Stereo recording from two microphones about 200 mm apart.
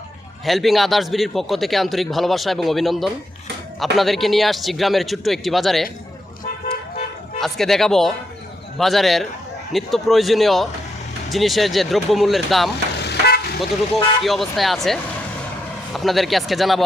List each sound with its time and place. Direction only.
0.4 s a man's voice: centre (ahead or behind)
7.3 s a man's voice: centre (ahead or behind)
13.0 s vehicle: 55° left (ahead or behind)
13.6 s a man's voice: centre (ahead or behind)